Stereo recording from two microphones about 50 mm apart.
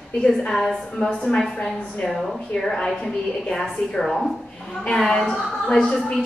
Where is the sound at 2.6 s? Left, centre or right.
Centre.